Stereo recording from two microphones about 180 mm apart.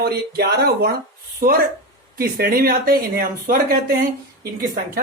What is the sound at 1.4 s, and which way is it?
Speech, 50° right (ahead or behind).